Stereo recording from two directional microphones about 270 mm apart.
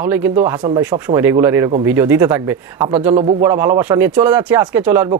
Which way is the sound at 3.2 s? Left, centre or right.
Right.